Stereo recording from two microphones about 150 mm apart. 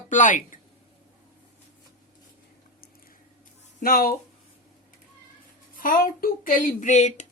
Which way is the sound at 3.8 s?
80° left.